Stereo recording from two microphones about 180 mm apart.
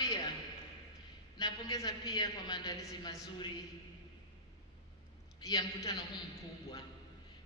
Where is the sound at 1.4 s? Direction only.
20° left (ahead or behind).